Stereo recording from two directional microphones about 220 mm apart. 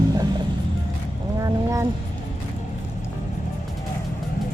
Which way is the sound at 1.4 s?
15° right (ahead or behind).